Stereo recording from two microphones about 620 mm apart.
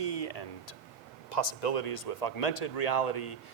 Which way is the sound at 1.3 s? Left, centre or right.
Left.